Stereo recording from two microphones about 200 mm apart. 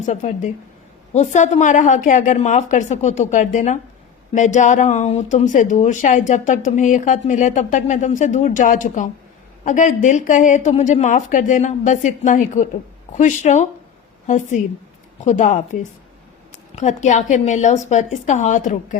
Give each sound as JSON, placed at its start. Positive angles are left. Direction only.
{"t": 0.0, "sound": "speech", "side_deg": 40}